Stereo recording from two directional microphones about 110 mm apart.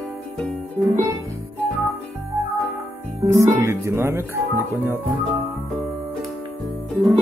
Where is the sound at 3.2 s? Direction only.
25° right (ahead or behind).